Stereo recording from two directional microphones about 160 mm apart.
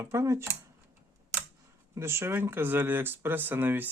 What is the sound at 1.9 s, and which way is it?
A man's voice, 15° right (ahead or behind).